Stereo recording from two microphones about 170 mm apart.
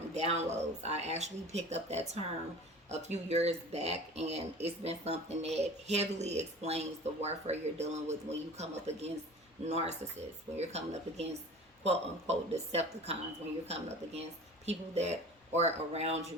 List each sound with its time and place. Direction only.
0.1 s speech: 40° right (ahead or behind)